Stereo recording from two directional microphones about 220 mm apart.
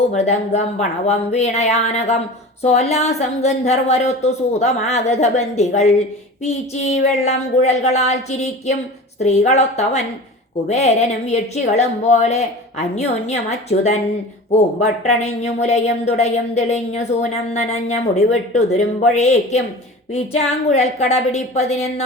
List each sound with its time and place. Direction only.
0.1 s a woman's voice: 30° left (ahead or behind)